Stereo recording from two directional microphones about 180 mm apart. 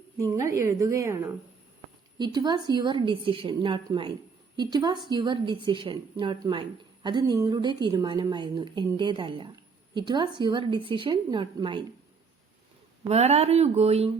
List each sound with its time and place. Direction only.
0.2 s a woman's voice: 15° right (ahead or behind)
13.1 s speech: 35° right (ahead or behind)